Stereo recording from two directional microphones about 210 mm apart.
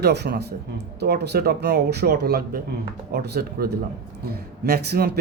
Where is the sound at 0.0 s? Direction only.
55° right (ahead or behind).